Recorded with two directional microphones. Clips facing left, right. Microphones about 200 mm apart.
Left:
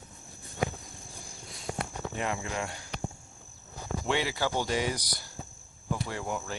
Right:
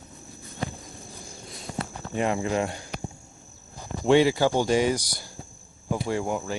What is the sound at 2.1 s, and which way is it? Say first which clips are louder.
Speech: right 9 dB; 30° right (ahead or behind).